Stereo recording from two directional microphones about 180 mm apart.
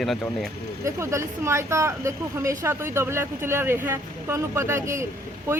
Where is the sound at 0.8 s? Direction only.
15° right (ahead or behind).